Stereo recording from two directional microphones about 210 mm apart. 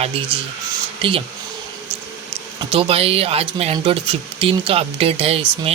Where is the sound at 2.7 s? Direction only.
25° right (ahead or behind).